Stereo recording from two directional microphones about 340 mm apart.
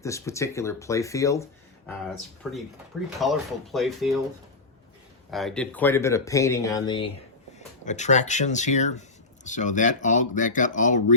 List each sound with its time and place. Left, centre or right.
0.0 s speech: centre
5.3 s speech: centre; by 11.0 s left